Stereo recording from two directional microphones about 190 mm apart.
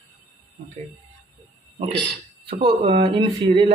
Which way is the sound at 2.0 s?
30° right (ahead or behind).